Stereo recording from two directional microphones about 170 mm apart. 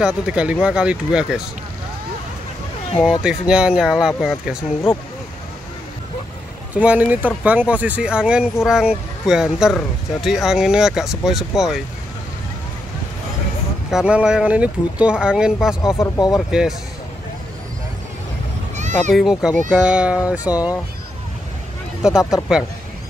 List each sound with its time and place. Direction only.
0.0 s speech: 5° right (ahead or behind)
3.2 s speech: 5° right (ahead or behind)
6.7 s speech: 10° right (ahead or behind)
13.8 s speech: 5° right (ahead or behind)
15.8 s speech: 20° left (ahead or behind)
16.4 s speech: 5° right (ahead or behind)
18.8 s a sound: 45° right (ahead or behind)
19.1 s speech: centre (ahead or behind)
22.3 s speech: centre (ahead or behind)